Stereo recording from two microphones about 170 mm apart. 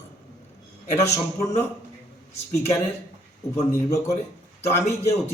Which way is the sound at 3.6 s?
20° left (ahead or behind).